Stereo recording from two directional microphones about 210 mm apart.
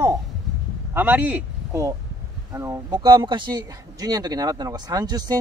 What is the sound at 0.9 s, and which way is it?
Speech, 10° right (ahead or behind).